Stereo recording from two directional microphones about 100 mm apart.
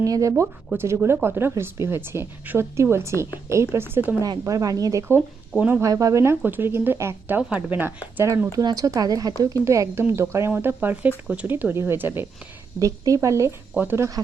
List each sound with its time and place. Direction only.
0.0 s a woman's voice: 35° right (ahead or behind)
4.2 s speech: 35° right (ahead or behind); by 5.8 s 15° right (ahead or behind)
5.8 s speech: 35° right (ahead or behind)
6.4 s a woman's voice: 20° right (ahead or behind)
8.5 s a woman's voice: 35° right (ahead or behind); by 12.2 s 20° right (ahead or behind)
12.8 s a woman's voice: 35° right (ahead or behind)